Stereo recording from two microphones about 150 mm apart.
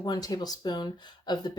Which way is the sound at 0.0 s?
25° left (ahead or behind).